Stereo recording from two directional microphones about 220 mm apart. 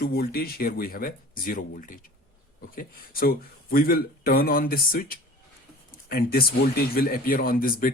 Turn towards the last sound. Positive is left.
turn(degrees=40)  # may be behind; listen again after turning